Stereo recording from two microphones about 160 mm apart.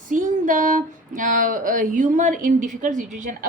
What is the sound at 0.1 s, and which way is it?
Speech, 55° right (ahead or behind).